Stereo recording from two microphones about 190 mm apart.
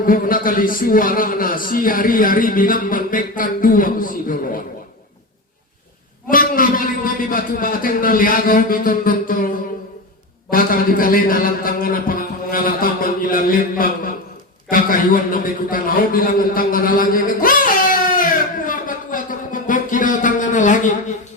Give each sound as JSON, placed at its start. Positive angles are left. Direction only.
{"t": 0.0, "sound": "a man's voice", "side_deg": 45}
{"t": 6.3, "sound": "a man's voice", "side_deg": 45}
{"t": 10.5, "sound": "a man's voice", "side_deg": 50}
{"t": 14.7, "sound": "a sound", "side_deg": 45}